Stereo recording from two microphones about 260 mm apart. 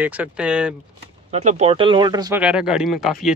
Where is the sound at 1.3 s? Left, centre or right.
Right.